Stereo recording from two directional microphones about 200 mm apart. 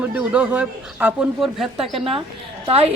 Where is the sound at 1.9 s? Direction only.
25° right (ahead or behind).